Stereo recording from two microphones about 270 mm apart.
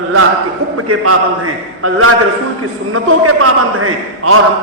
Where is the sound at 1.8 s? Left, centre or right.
Right.